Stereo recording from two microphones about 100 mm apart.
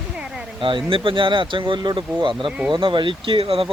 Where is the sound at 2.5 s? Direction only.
10° right (ahead or behind).